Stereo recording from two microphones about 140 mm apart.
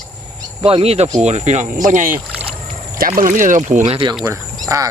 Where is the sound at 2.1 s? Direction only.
10° right (ahead or behind).